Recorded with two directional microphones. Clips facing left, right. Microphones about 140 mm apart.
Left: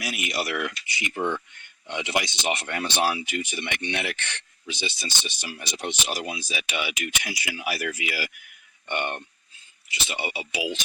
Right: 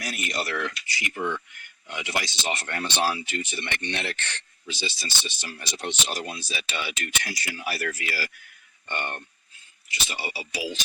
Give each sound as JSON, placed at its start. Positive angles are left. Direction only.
{"t": 0.0, "sound": "speech", "side_deg": 10}